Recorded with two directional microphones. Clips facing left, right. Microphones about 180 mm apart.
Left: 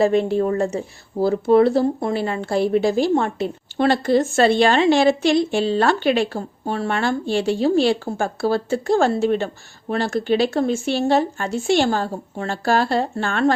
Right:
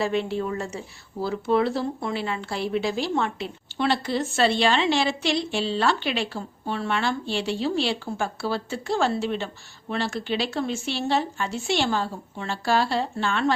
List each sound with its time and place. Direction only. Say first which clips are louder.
0.0 s speech: left 8 dB; 45° left (ahead or behind)